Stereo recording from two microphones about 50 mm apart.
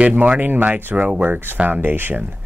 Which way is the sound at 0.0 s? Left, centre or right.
Right.